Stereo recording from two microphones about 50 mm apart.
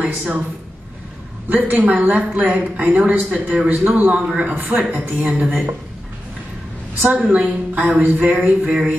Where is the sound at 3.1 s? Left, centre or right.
Right.